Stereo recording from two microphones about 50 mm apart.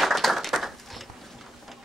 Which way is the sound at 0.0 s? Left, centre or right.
Centre.